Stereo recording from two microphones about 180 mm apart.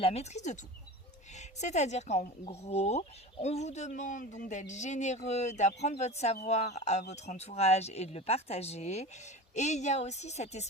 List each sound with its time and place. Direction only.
0.0 s speech: 35° left (ahead or behind)